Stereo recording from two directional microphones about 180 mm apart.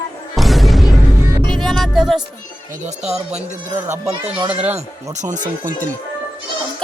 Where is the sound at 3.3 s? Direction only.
40° right (ahead or behind).